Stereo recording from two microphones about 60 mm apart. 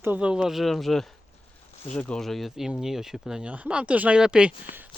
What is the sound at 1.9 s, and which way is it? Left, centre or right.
Speech, left.